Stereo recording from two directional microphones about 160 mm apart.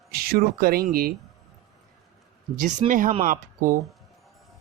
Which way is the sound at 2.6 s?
50° right (ahead or behind).